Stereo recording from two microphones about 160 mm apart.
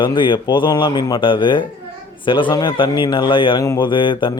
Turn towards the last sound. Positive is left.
turn(degrees=30)  # may be behind; listen again after turning